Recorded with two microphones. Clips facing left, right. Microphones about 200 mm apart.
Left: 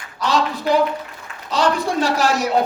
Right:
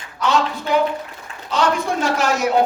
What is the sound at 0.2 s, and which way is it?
A woman's voice, 35° left (ahead or behind).